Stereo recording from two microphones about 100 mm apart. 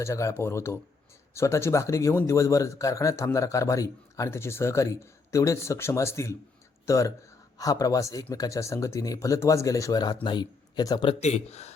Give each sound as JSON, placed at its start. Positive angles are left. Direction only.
{"t": 0.0, "sound": "a man's voice", "side_deg": 30}
{"t": 11.1, "sound": "speech", "side_deg": 90}